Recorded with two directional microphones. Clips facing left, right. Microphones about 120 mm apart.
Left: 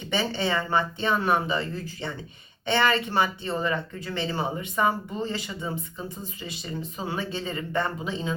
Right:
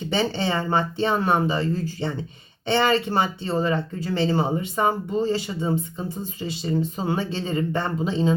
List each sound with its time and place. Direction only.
0.1 s speech: 30° right (ahead or behind)